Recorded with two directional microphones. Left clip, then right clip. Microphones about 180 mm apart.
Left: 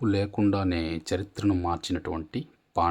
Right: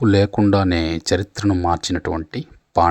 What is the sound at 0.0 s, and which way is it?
Speech, 40° right (ahead or behind).